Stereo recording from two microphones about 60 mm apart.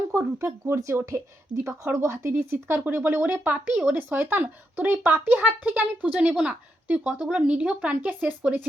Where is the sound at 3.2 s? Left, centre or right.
Right.